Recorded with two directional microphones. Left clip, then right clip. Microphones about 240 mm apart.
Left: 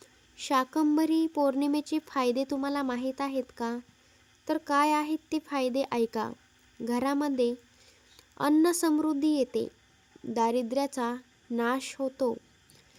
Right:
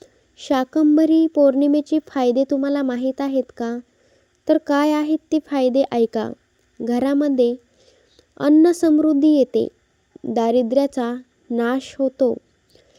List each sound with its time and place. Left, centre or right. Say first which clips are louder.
0.0 s a woman's voice: right 3 dB; centre